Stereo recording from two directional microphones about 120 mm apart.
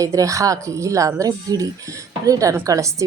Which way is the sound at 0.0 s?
25° right (ahead or behind).